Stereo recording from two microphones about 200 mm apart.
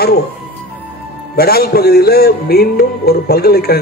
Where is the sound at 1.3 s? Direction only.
50° left (ahead or behind).